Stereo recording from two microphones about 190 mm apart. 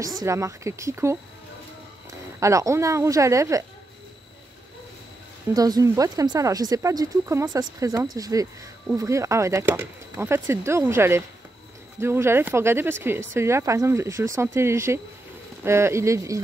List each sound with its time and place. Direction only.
0.0 s speech: 15° right (ahead or behind)
5.5 s speech: 20° right (ahead or behind)